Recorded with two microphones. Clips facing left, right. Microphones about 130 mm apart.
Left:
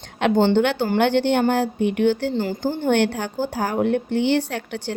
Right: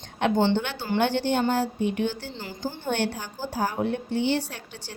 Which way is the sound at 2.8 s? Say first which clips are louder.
Left 8 dB; 65° left (ahead or behind).